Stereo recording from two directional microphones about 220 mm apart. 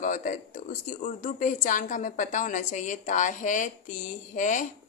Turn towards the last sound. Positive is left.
turn(degrees=35)  # may be behind; listen again after turning